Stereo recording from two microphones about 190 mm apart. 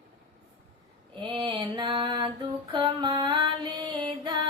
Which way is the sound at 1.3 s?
25° right (ahead or behind).